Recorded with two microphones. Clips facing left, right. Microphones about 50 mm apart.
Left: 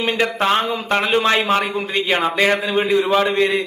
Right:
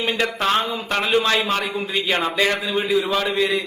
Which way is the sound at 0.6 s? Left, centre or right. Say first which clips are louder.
Left 4 dB; centre.